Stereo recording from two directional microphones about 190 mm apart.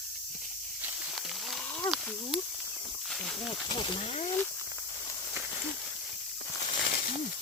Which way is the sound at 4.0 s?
35° left (ahead or behind).